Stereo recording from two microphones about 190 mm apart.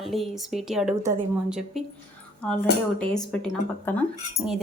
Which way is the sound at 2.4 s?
5° left (ahead or behind).